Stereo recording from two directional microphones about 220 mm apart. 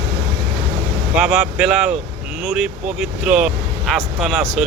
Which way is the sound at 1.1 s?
5° right (ahead or behind).